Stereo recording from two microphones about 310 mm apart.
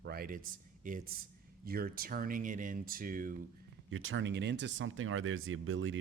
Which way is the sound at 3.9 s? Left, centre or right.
Right.